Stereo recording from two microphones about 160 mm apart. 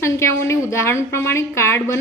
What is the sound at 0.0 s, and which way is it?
A woman's voice, 15° left (ahead or behind).